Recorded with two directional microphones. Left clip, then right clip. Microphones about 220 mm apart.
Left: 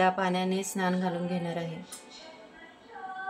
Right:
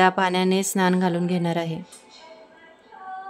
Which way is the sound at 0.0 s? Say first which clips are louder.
Right 7 dB; 45° right (ahead or behind).